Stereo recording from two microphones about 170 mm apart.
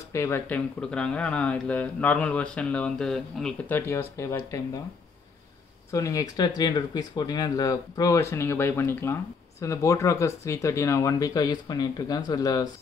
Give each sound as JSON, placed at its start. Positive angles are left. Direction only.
{"t": 0.1, "sound": "speech", "side_deg": 15}
{"t": 5.9, "sound": "speech", "side_deg": 20}